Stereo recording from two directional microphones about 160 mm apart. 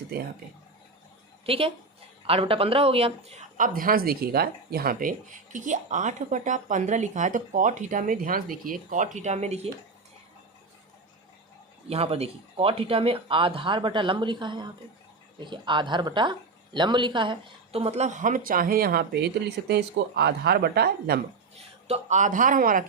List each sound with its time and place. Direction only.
1.5 s speech: 35° right (ahead or behind)
3.6 s speech: 60° right (ahead or behind); by 9.6 s 45° right (ahead or behind)
11.9 s speech: 40° right (ahead or behind); by 21.2 s 85° right
21.8 s speech: 45° right (ahead or behind)